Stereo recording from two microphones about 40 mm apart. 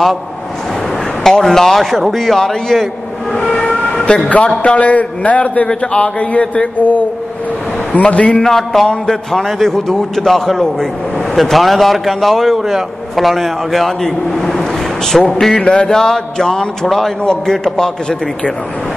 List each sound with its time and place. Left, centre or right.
1.2 s a man's voice: centre
3.8 s vehicle: left
4.6 s a man's voice: left
8.4 s a man's voice: centre
9.4 s a man's voice: centre
15.5 s a sound: left
15.9 s a man's voice: centre
17.2 s a sound: centre
17.6 s a man's voice: centre